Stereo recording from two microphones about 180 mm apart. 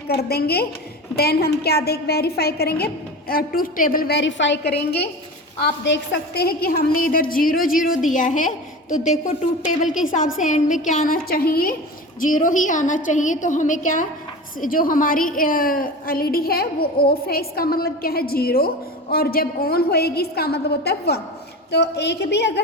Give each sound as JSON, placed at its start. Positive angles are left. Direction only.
{"t": 0.1, "sound": "a woman's voice", "side_deg": 60}
{"t": 5.6, "sound": "a woman's voice", "side_deg": 80}